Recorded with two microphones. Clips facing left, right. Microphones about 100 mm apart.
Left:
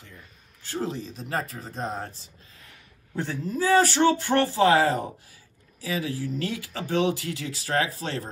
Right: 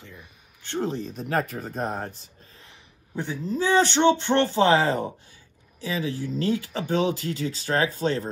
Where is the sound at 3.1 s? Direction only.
15° right (ahead or behind).